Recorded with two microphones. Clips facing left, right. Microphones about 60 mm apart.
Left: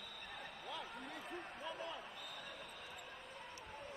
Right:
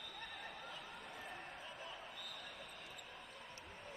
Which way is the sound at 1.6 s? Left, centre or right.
Left.